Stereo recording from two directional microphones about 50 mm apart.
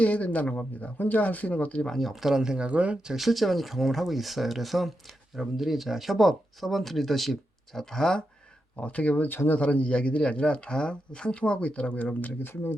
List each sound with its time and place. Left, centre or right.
0.0 s speech: left
1.9 s speech: centre; by 3.0 s right
3.1 s speech: centre
8.8 s speech: left
9.3 s speech: left
9.6 s speech: left